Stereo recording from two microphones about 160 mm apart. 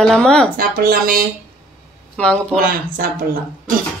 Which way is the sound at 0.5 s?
65° right (ahead or behind).